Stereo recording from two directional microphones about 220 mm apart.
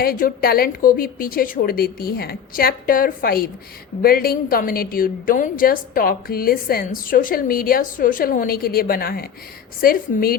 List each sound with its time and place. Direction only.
0.0 s a woman's voice: 45° left (ahead or behind)